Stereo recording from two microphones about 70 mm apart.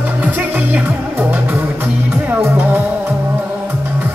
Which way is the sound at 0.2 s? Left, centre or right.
Right.